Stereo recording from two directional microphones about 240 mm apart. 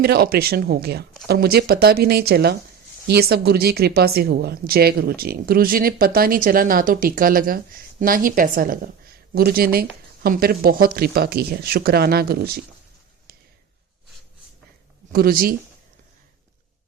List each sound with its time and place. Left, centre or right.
0.0 s speech: right
15.1 s speech: right